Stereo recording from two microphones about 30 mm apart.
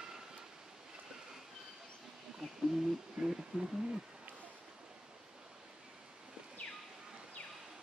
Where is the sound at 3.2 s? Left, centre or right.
Centre.